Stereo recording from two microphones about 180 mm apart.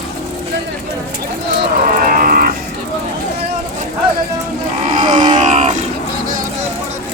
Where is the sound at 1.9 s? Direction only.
50° right (ahead or behind).